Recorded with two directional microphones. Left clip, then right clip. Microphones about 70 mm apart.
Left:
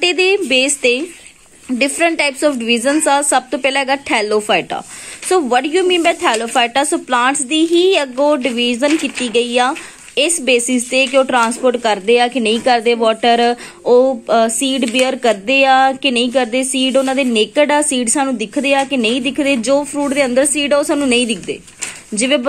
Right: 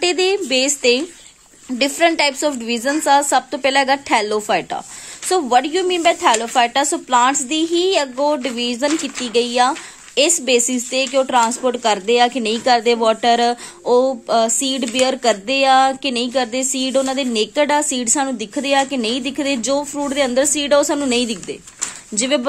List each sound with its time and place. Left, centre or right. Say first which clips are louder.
0.0 s a woman's voice: left 4 dB; right